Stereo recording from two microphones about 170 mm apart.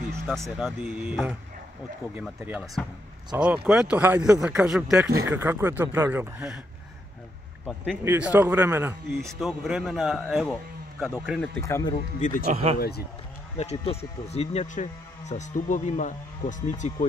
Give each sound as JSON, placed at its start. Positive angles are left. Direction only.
{"t": 0.3, "sound": "a man's voice", "side_deg": 0}
{"t": 2.4, "sound": "a man's voice", "side_deg": -5}
{"t": 5.1, "sound": "speech", "side_deg": -15}
{"t": 7.6, "sound": "a man's voice", "side_deg": 0}
{"t": 8.0, "sound": "speech", "side_deg": -10}
{"t": 9.4, "sound": "a man's voice", "side_deg": 0}
{"t": 11.6, "sound": "speech", "side_deg": 15}
{"t": 12.2, "sound": "speech", "side_deg": 50}
{"t": 12.4, "sound": "speech", "side_deg": -35}
{"t": 12.7, "sound": "speech", "side_deg": 65}
{"t": 13.6, "sound": "speech", "side_deg": 40}